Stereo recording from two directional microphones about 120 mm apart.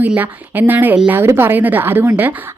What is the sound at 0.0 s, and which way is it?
A woman's voice, 15° right (ahead or behind).